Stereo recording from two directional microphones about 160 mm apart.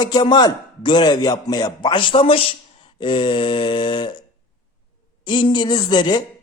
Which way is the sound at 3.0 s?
30° left (ahead or behind).